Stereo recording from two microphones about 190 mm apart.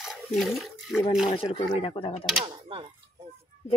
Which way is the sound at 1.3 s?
30° left (ahead or behind).